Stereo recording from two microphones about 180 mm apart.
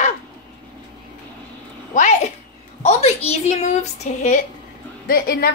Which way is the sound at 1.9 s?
45° left (ahead or behind).